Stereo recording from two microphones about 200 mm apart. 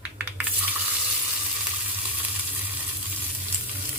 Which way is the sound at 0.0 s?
5° right (ahead or behind).